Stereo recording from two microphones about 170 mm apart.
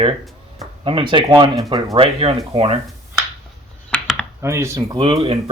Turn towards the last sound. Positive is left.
turn(degrees=-30)  # may be behind; listen again after turning